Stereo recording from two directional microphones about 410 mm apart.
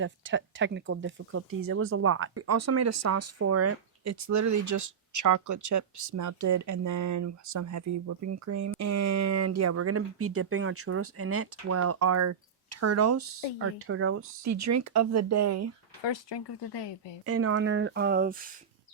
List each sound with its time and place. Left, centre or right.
0.0 s speech: right
16.0 s speech: left
17.2 s speech: right